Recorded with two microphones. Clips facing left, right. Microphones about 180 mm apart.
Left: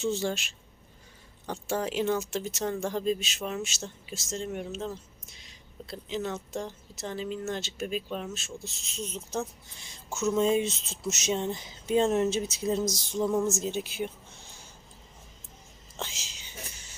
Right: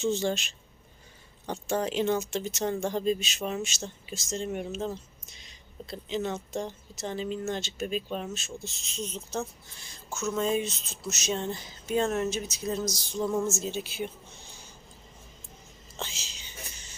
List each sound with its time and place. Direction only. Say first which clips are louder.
0.0 s speech: right 2 dB; 5° left (ahead or behind)
1.6 s speech: right 1 dB; 5° left (ahead or behind)
9.7 s speech: left 2 dB; 20° left (ahead or behind)
16.0 s speech: even; 10° left (ahead or behind)